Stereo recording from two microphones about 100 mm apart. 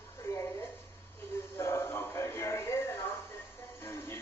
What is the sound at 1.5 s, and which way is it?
Music, 25° left (ahead or behind).